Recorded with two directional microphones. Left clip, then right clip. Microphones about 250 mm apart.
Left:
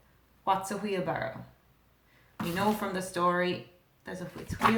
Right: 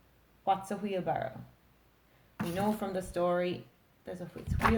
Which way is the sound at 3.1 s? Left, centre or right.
Centre.